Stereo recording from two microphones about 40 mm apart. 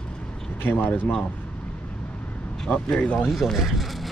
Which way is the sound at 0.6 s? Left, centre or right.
Left.